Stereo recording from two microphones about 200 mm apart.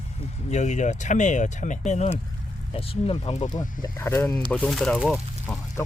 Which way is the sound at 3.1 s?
30° left (ahead or behind).